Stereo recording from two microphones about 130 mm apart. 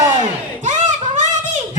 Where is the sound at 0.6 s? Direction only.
65° right (ahead or behind).